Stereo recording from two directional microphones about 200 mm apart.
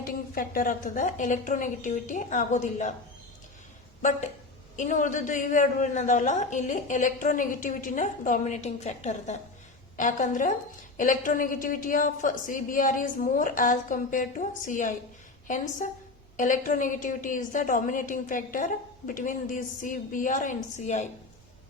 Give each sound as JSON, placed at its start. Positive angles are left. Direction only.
{"t": 0.0, "sound": "a woman's voice", "side_deg": 45}
{"t": 4.8, "sound": "a woman's voice", "side_deg": 40}